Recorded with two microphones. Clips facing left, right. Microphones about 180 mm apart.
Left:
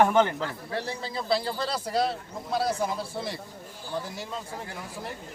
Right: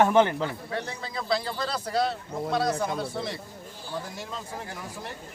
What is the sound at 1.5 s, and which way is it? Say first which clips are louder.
Speech: left 1 dB; 30° left (ahead or behind).